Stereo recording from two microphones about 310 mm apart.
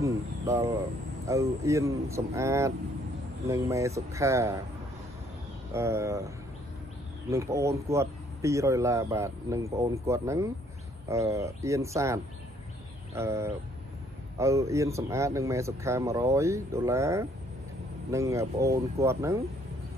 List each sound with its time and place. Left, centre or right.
0.0 s a sound: centre
1.2 s speech: centre
5.7 s speech: centre